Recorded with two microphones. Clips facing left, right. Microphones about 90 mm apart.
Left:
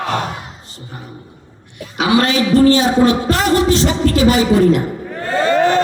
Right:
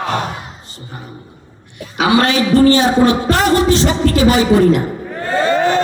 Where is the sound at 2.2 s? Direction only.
60° right (ahead or behind).